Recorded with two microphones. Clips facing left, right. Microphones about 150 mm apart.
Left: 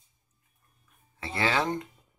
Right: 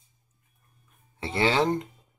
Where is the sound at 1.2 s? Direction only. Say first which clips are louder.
Right 4 dB; 25° right (ahead or behind).